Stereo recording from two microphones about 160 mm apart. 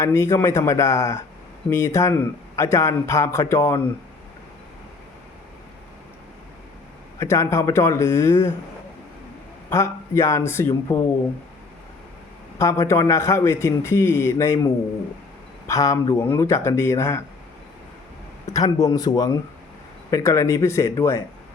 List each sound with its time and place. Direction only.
0.0 s a man's voice: 20° left (ahead or behind)
7.2 s a man's voice: 20° left (ahead or behind)
9.6 s a man's voice: 20° left (ahead or behind)
12.5 s a man's voice: 20° left (ahead or behind)
18.5 s a man's voice: 20° left (ahead or behind)